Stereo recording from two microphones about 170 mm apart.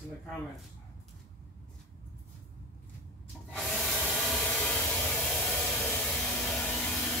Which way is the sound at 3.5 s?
5° left (ahead or behind).